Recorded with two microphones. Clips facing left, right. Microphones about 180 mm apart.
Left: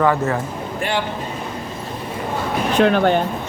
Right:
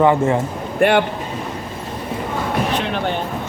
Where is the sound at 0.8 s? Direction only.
60° right (ahead or behind).